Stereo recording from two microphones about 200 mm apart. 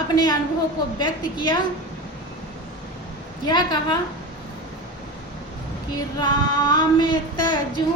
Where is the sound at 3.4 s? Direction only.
20° left (ahead or behind).